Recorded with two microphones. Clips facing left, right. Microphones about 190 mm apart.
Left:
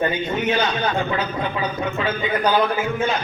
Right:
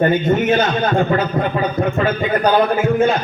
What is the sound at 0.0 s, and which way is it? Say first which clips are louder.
A man's voice: right 7 dB; 50° right (ahead or behind).